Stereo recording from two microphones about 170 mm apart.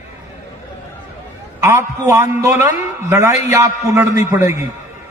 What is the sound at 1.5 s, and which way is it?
A man's voice, 15° right (ahead or behind).